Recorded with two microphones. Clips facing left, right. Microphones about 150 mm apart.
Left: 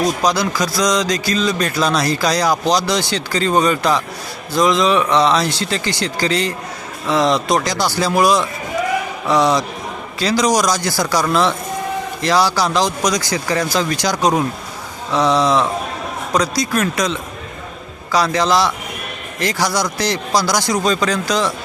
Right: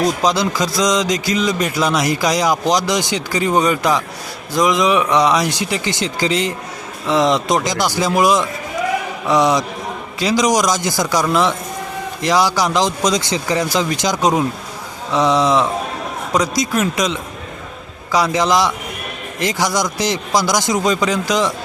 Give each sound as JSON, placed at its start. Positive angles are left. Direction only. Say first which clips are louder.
{"t": 0.2, "sound": "a man's voice", "louder": "right 1 dB", "side_deg": -20}